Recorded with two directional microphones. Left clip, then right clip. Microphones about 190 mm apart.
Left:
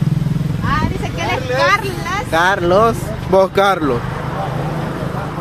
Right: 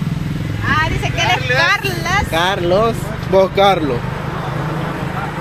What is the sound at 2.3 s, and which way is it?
Speech, 10° left (ahead or behind).